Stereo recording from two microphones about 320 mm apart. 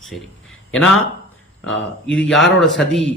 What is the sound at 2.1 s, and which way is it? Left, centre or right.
Speech, centre.